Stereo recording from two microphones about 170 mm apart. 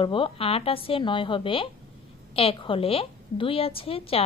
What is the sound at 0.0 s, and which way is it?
A woman's voice, 30° left (ahead or behind).